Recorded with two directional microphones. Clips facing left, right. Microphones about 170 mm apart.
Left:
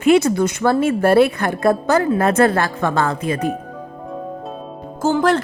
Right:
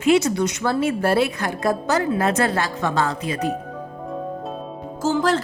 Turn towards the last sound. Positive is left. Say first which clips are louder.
# left 4 dB
turn(degrees=55)  # may be behind; listen again after turning